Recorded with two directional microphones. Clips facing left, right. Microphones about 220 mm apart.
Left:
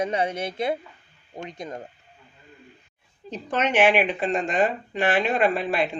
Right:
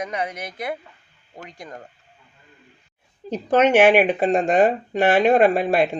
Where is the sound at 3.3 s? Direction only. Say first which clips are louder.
Right 7 dB; 40° right (ahead or behind).